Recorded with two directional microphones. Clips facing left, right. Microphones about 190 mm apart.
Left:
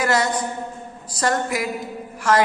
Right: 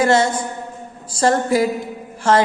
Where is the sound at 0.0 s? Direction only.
25° right (ahead or behind).